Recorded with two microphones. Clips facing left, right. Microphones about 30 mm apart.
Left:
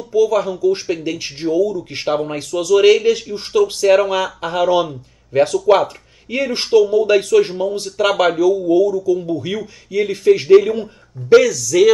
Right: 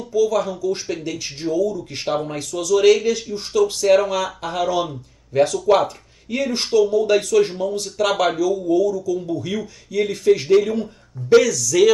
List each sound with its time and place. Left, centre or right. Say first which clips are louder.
0.1 s speech: left 4 dB; centre